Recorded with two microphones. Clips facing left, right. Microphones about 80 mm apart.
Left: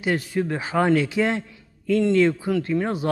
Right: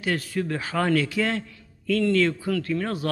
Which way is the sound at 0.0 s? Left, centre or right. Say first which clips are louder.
Left 3 dB; centre.